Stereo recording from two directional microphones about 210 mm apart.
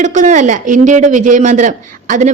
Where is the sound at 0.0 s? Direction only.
35° right (ahead or behind).